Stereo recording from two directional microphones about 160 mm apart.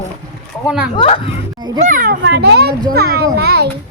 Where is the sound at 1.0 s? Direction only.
35° left (ahead or behind).